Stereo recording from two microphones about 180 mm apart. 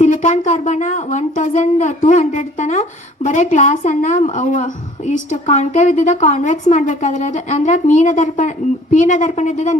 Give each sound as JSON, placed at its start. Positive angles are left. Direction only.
{"t": 0.0, "sound": "a woman's voice", "side_deg": 40}